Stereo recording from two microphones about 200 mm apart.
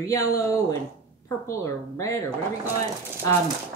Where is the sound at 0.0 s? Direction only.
15° left (ahead or behind).